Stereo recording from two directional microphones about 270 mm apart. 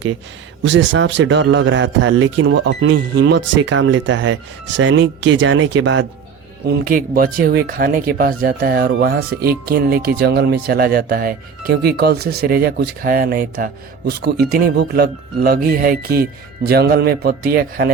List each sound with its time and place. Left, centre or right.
0.6 s a man's voice: right
6.7 s speech: right